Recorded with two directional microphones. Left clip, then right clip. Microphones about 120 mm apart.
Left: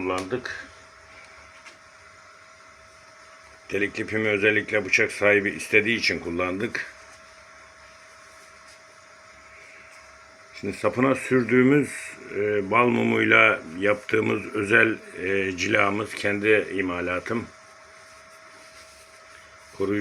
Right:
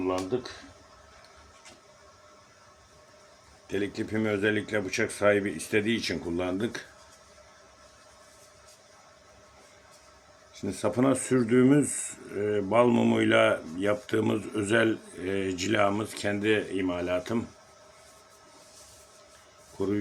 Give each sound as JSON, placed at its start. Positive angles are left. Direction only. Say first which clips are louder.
{"t": 3.7, "sound": "speech", "louder": "left 5 dB", "side_deg": -20}
{"t": 10.5, "sound": "speech", "louder": "left 4 dB", "side_deg": -25}